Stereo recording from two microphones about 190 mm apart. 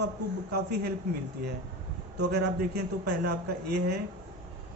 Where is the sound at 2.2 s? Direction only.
60° right (ahead or behind).